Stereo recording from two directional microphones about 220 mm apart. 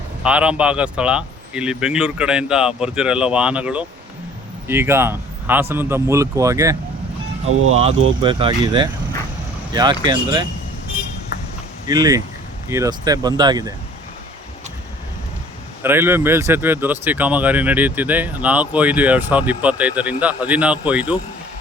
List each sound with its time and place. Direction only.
0.2 s speech: 5° right (ahead or behind)
8.2 s speech: 20° right (ahead or behind)
11.9 s speech: 15° right (ahead or behind)
15.8 s speech: 10° right (ahead or behind)